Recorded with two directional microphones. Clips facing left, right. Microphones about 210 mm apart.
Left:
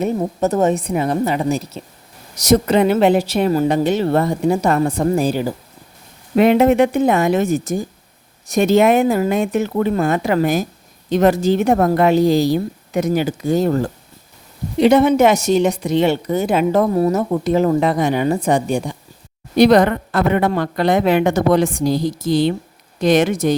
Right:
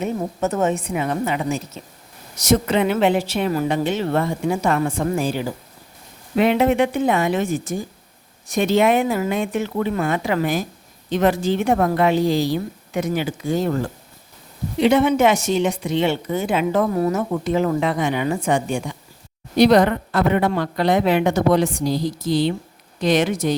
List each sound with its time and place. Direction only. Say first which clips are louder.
0.0 s a woman's voice: left 4 dB; 35° left (ahead or behind)
19.5 s speech: left 2 dB; 50° left (ahead or behind)